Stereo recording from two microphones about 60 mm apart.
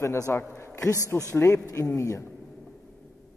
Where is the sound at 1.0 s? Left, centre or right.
Left.